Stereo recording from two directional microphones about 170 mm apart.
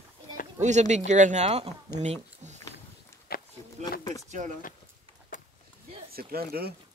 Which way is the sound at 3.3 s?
65° left (ahead or behind).